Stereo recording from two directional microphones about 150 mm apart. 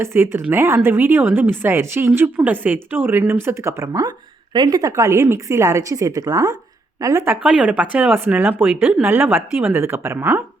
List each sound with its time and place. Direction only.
0.0 s a woman's voice: 15° right (ahead or behind)
7.4 s speech: 5° right (ahead or behind)